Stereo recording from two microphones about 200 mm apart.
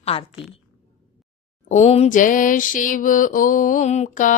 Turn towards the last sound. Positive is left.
turn(degrees=40)  # may be behind; listen again after turning